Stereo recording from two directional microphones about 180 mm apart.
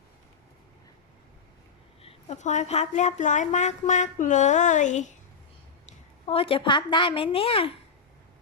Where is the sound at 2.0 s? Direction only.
35° left (ahead or behind).